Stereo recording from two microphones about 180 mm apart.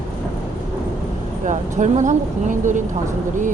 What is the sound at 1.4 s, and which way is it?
Speech, 45° right (ahead or behind).